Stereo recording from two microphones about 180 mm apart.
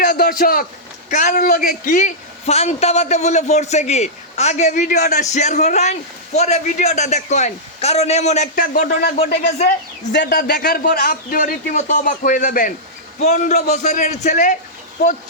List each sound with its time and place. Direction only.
0.0 s a sound: 55° left (ahead or behind)
1.1 s a man's voice: 45° left (ahead or behind)
10.1 s a man's voice: 70° left (ahead or behind); by 14.6 s 45° left (ahead or behind)